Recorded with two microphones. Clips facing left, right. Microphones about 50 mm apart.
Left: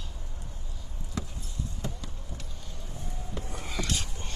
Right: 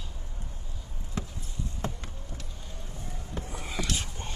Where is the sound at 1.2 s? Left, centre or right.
Right.